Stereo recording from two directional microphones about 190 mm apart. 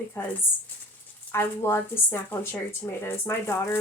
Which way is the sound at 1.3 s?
10° left (ahead or behind).